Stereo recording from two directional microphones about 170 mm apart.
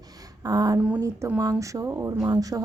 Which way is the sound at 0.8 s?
10° right (ahead or behind).